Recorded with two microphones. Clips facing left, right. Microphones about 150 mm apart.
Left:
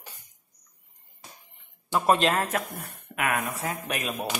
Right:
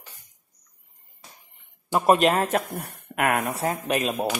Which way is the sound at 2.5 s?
35° right (ahead or behind).